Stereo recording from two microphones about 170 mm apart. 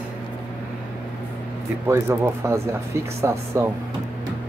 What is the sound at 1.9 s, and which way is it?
Speech, 15° right (ahead or behind).